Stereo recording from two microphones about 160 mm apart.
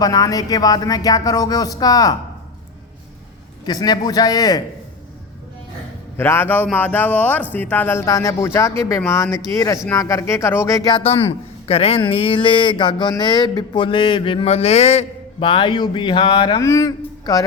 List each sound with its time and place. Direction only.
0.0 s speech: 25° left (ahead or behind)
3.7 s speech: 25° left (ahead or behind)
6.1 s speech: 15° left (ahead or behind)
11.0 s a man's voice: 40° left (ahead or behind); by 17.4 s 20° left (ahead or behind)